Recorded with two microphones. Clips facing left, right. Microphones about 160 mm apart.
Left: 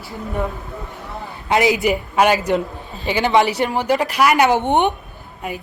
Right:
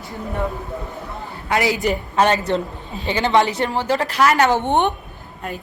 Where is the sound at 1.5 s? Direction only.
20° left (ahead or behind).